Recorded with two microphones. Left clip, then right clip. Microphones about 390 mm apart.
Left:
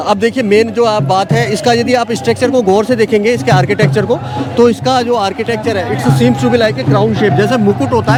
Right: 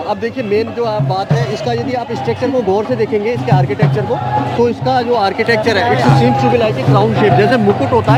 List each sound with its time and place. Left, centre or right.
0.1 s speech: left
4.6 s speech: left
5.2 s speech: centre
6.2 s speech: left
7.0 s speech: centre